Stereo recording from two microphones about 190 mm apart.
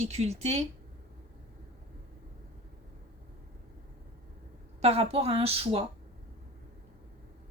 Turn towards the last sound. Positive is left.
turn(degrees=-30)  # may be behind; listen again after turning